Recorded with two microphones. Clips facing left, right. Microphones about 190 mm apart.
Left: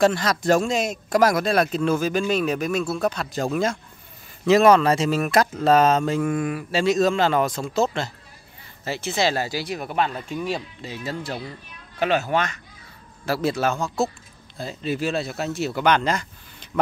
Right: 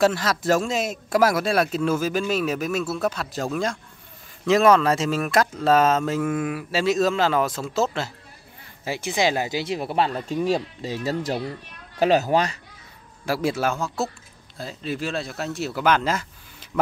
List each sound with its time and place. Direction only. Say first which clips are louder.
0.0 s speech: left 1 dB; 5° right (ahead or behind)
4.5 s speech: left 2 dB; centre (ahead or behind); by 12.5 s 35° right (ahead or behind)
13.2 s a man's voice: left 1 dB; 10° right (ahead or behind)